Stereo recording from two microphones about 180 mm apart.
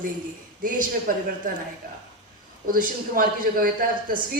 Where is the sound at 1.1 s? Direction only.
50° right (ahead or behind).